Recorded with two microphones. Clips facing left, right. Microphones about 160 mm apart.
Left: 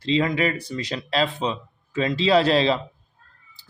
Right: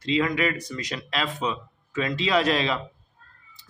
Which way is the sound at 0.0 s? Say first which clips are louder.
Left 2 dB; 30° left (ahead or behind).